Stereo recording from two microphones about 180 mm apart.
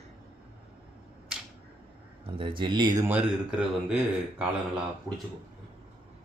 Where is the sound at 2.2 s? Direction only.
30° right (ahead or behind).